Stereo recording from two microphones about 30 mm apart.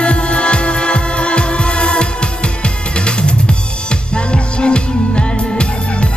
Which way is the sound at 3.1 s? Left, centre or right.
Left.